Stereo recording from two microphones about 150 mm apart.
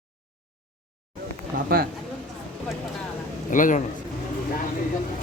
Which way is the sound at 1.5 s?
80° right.